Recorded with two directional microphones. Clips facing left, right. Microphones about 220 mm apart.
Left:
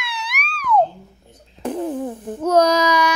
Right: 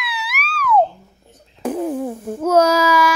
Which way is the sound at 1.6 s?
10° right (ahead or behind).